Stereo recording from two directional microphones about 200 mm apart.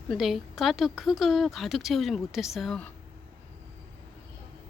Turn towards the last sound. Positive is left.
turn(degrees=5)  # may be behind; listen again after turning